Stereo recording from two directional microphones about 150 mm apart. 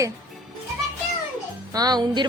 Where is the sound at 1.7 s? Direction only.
25° right (ahead or behind).